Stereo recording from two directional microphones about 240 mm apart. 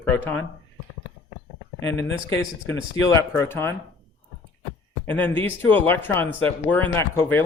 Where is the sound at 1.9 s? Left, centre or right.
Left.